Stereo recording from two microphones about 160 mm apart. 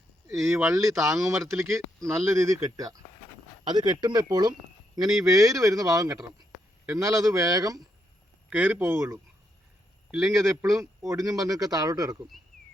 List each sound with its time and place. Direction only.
0.5 s speech: 20° right (ahead or behind)
8.4 s a man's voice: 10° right (ahead or behind)
10.5 s speech: 20° right (ahead or behind)